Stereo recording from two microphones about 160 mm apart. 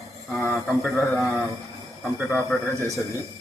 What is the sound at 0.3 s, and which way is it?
A man's voice, centre (ahead or behind).